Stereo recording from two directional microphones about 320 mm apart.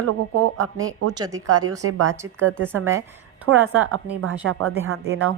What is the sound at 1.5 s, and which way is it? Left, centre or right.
Speech, right.